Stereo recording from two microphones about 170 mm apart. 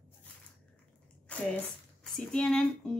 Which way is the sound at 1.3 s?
5° left (ahead or behind).